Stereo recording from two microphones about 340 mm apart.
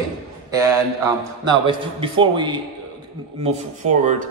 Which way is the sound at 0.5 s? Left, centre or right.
Centre.